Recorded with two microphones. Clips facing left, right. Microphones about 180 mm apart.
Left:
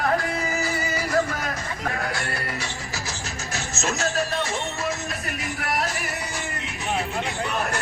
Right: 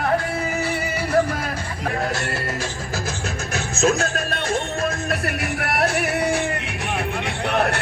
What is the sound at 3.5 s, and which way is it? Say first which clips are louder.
Music: right 9 dB; 55° right (ahead or behind).